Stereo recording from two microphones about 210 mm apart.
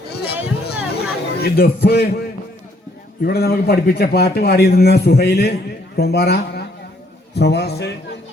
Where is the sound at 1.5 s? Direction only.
45° left (ahead or behind).